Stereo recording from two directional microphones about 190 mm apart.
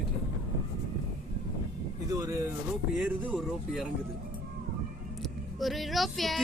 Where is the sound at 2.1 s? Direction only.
15° right (ahead or behind).